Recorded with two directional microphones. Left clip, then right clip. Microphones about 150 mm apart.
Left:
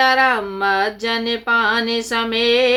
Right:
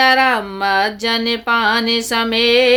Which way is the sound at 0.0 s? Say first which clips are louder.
Right 2 dB; 45° right (ahead or behind).